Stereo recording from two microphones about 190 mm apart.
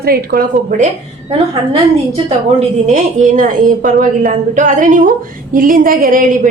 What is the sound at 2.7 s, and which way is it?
A woman's voice, 40° right (ahead or behind).